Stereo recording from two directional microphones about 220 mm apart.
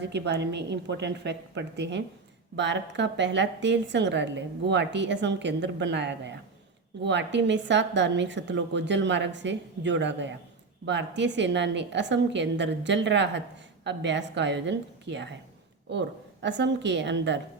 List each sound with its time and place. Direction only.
0.0 s a woman's voice: 50° right (ahead or behind)